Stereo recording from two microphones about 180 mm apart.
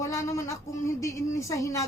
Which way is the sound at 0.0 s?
15° left (ahead or behind).